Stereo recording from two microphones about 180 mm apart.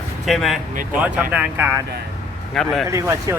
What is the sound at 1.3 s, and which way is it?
Speech, 10° right (ahead or behind).